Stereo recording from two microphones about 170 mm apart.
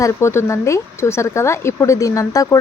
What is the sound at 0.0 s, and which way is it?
Speech, 15° left (ahead or behind).